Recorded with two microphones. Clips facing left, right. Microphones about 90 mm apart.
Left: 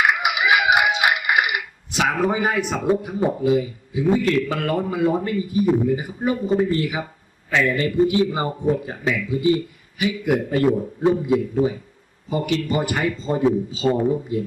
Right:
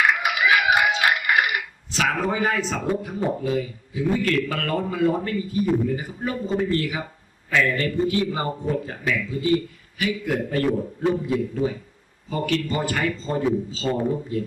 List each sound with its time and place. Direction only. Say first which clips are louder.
0.1 s a sound: left 1 dB; 15° left (ahead or behind)
2.8 s a man's voice: left 4 dB; 20° left (ahead or behind)
12.6 s a man's voice: left 2 dB; 20° left (ahead or behind)